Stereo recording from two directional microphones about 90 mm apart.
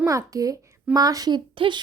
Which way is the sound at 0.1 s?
40° right (ahead or behind).